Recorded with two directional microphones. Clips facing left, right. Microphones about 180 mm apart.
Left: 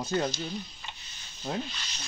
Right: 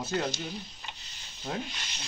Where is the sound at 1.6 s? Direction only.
20° right (ahead or behind).